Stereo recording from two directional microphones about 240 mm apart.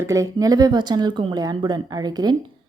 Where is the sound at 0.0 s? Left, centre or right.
Centre.